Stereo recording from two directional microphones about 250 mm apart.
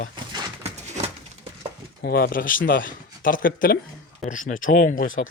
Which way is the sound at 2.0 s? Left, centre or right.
Left.